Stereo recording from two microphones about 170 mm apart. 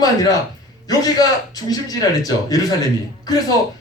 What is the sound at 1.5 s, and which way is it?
Speech, 20° left (ahead or behind).